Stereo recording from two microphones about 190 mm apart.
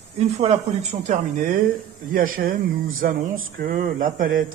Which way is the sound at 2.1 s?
45° right (ahead or behind).